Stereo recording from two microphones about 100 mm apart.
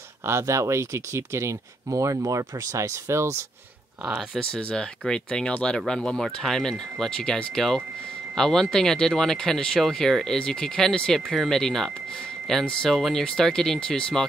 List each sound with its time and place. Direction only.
0.2 s speech: 25° right (ahead or behind)
4.0 s speech: 5° right (ahead or behind)